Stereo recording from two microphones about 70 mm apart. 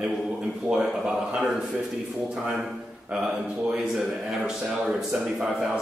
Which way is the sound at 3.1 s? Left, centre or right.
Centre.